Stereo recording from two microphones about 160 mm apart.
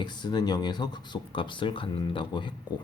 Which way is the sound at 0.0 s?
25° left (ahead or behind).